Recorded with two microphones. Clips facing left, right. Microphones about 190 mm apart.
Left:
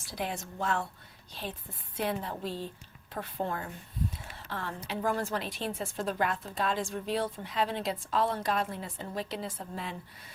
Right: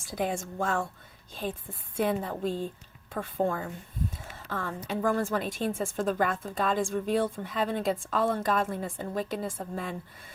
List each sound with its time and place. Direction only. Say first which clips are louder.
0.1 s a woman's voice: right 5 dB; 50° right (ahead or behind)
2.0 s a woman's voice: right 5 dB; 50° right (ahead or behind)